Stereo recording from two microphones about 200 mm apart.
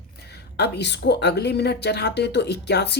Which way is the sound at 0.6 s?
60° left (ahead or behind).